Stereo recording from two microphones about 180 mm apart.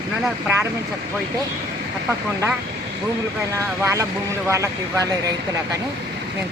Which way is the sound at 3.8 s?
15° right (ahead or behind).